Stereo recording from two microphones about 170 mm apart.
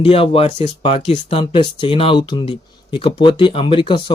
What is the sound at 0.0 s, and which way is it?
Speech, 35° left (ahead or behind).